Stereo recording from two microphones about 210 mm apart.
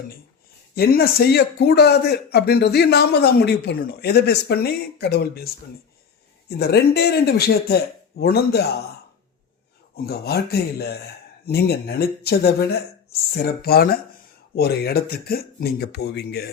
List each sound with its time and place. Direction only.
0.8 s speech: 45° left (ahead or behind)
6.6 s speech: 50° left (ahead or behind)
9.9 s speech: 50° left (ahead or behind)